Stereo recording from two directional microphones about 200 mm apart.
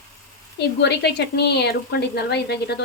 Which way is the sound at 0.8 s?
55° left (ahead or behind).